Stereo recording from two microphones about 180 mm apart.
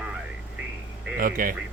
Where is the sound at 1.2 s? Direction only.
50° right (ahead or behind).